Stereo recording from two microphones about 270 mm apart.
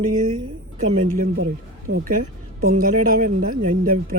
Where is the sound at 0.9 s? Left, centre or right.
Right.